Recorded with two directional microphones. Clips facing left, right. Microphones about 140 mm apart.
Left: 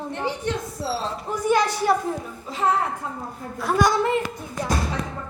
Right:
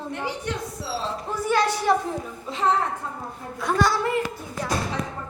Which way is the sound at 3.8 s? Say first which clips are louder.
Left 3 dB; 20° left (ahead or behind).